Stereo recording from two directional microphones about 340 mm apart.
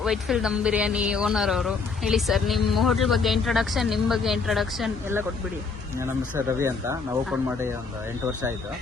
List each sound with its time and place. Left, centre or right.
0.0 s a man's voice: centre